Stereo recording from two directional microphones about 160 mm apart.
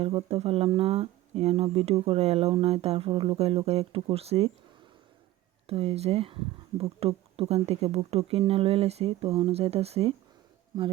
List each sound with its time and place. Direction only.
0.0 s speech: 35° right (ahead or behind)
5.6 s speech: 35° right (ahead or behind)